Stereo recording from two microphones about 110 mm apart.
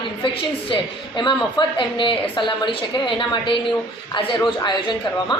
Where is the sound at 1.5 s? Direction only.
50° left (ahead or behind).